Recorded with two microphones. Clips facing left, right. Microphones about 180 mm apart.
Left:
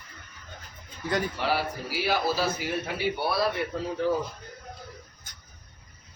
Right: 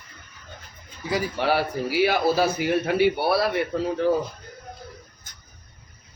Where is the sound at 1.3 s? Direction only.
65° right (ahead or behind).